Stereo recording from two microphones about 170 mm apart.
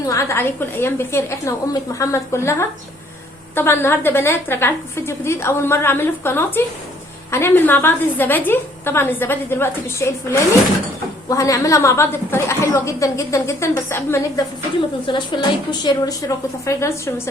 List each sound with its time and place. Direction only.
0.1 s a woman's voice: 15° left (ahead or behind)
11.3 s a woman's voice: 20° left (ahead or behind)